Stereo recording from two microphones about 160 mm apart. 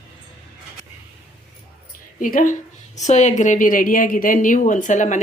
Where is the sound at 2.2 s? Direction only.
55° left (ahead or behind).